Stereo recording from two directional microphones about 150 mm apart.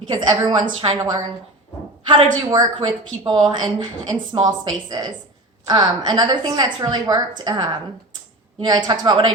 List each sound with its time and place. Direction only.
0.1 s a woman's voice: 30° right (ahead or behind)
2.5 s a woman's voice: 30° right (ahead or behind)